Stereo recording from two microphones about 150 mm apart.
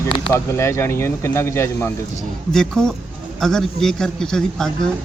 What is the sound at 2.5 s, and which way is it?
Speech, 5° left (ahead or behind).